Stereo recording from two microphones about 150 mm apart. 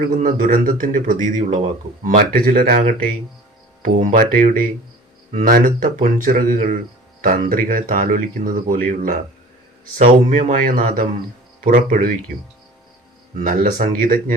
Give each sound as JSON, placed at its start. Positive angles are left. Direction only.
{"t": 0.2, "sound": "a man's voice", "side_deg": -60}
{"t": 2.0, "sound": "speech", "side_deg": -70}
{"t": 5.3, "sound": "speech", "side_deg": -50}
{"t": 5.5, "sound": "a man's voice", "side_deg": -65}
{"t": 13.3, "sound": "a man's voice", "side_deg": -60}